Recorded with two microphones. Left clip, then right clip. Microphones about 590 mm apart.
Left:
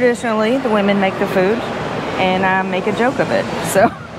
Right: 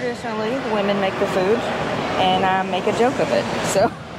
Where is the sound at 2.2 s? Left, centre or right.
Centre.